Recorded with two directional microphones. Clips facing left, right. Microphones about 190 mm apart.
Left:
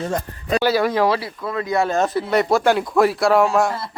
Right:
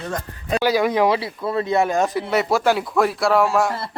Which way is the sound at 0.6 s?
15° right (ahead or behind).